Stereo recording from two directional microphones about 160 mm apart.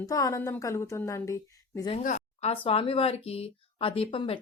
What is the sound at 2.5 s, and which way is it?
Speech, 35° left (ahead or behind).